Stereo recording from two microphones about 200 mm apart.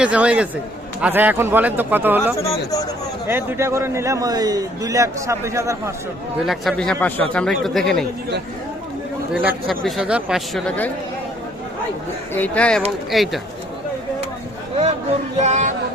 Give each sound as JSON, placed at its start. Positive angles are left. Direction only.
{"t": 0.0, "sound": "a man's voice", "side_deg": -5}
{"t": 2.3, "sound": "speech", "side_deg": 15}
{"t": 3.2, "sound": "a man's voice", "side_deg": -10}
{"t": 6.4, "sound": "a man's voice", "side_deg": 0}
{"t": 9.3, "sound": "a man's voice", "side_deg": -5}
{"t": 12.3, "sound": "a man's voice", "side_deg": 5}
{"t": 15.4, "sound": "a sound", "side_deg": -35}